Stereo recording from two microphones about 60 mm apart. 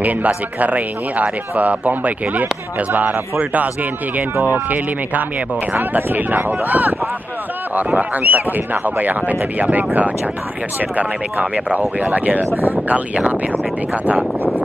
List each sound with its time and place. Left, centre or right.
0.6 s speech: right